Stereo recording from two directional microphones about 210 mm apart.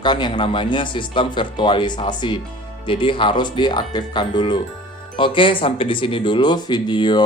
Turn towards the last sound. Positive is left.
turn(degrees=20)  # may be behind; listen again after turning